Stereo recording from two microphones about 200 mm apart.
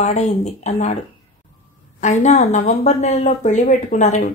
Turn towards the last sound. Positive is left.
turn(degrees=35)  # may be behind; listen again after turning